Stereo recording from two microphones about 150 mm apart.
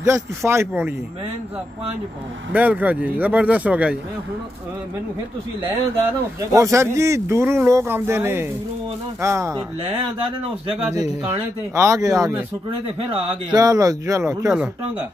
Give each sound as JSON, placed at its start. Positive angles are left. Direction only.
{"t": 0.0, "sound": "speech", "side_deg": -20}
{"t": 2.5, "sound": "speech", "side_deg": -10}
{"t": 6.5, "sound": "speech", "side_deg": -20}
{"t": 11.0, "sound": "speech", "side_deg": -20}